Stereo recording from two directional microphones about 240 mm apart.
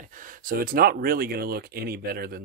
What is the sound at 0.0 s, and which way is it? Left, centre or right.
Speech, right.